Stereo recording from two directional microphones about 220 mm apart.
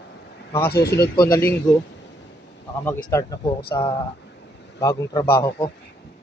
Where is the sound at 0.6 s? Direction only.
45° left (ahead or behind).